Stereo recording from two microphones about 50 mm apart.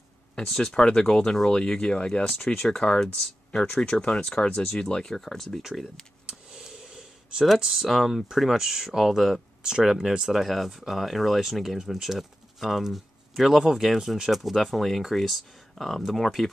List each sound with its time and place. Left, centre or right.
0.5 s speech: centre
6.2 s speech: centre